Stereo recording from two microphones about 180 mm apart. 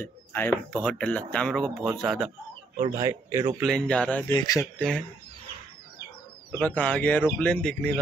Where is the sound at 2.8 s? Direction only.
20° right (ahead or behind).